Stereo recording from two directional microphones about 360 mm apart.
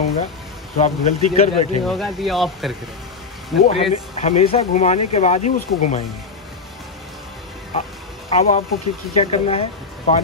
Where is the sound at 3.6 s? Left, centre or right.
Centre.